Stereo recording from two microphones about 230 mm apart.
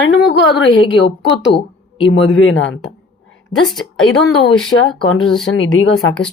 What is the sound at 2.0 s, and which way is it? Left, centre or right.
Speech, left.